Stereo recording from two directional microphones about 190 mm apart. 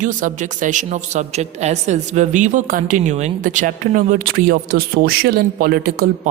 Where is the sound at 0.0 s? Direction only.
45° right (ahead or behind).